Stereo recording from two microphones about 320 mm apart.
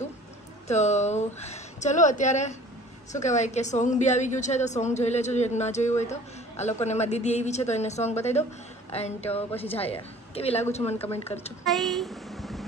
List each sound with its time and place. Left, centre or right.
0.7 s a woman's voice: left
11.6 s a woman's voice: centre